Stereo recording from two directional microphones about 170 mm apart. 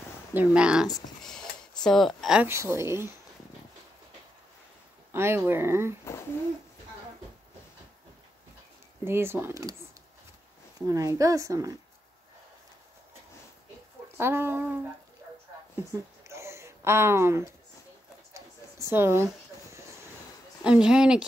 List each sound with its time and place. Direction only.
0.3 s a woman's voice: 10° right (ahead or behind)
1.9 s a woman's voice: centre (ahead or behind)
2.5 s speech: 15° right (ahead or behind)
5.1 s speech: 15° right (ahead or behind)
9.0 s speech: 15° right (ahead or behind)
10.9 s speech: 20° right (ahead or behind)
14.1 s speech: 15° right (ahead or behind)
15.7 s a sound: 20° right (ahead or behind)
20.6 s a woman's voice: 5° right (ahead or behind)